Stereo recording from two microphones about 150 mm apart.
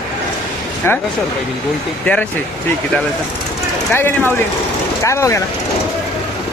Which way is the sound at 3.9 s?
15° left (ahead or behind).